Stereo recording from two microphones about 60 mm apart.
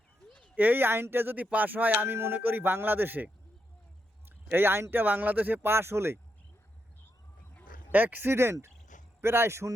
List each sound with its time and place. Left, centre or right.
0.5 s speech: right
1.5 s a sound: right
2.1 s speech: right
2.4 s speech: right
4.3 s speech: right
5.7 s speech: right
7.9 s speech: right
9.2 s speech: right